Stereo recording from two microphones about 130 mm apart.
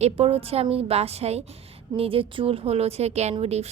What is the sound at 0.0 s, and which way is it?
A woman's voice, 50° right (ahead or behind).